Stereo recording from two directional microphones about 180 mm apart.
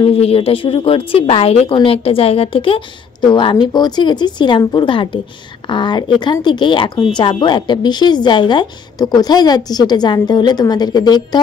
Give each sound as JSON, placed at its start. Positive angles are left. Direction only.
{"t": 0.0, "sound": "speech", "side_deg": 35}